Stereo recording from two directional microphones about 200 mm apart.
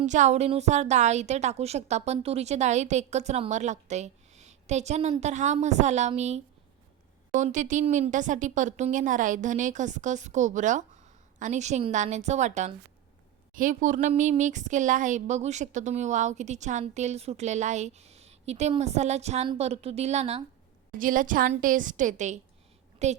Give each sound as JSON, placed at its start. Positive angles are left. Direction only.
{"t": 0.0, "sound": "speech", "side_deg": -35}